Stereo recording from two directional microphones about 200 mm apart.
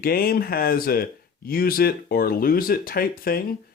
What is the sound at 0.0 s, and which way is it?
Speech, 50° left (ahead or behind).